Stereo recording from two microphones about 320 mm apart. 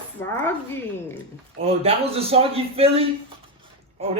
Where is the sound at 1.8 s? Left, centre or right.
Centre.